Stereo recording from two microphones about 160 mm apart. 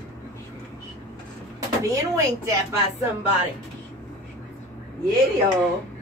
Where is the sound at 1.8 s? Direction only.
20° right (ahead or behind).